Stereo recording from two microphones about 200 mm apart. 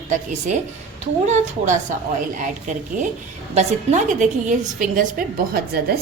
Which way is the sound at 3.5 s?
35° right (ahead or behind).